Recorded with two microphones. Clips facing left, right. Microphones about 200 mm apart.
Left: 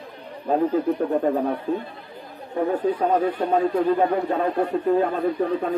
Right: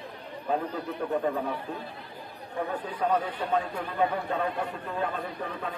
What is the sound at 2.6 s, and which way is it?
A man's voice, 40° left (ahead or behind).